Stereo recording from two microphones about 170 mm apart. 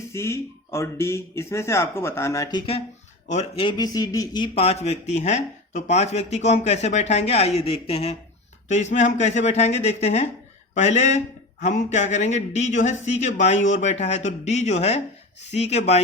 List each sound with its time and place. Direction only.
0.1 s a man's voice: 15° left (ahead or behind); by 16.0 s 40° left (ahead or behind)